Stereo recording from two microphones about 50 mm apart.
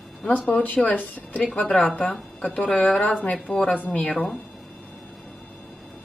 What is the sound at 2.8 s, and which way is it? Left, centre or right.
Speech, left.